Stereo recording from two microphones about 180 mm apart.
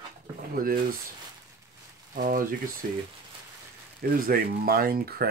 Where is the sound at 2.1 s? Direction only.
50° right (ahead or behind).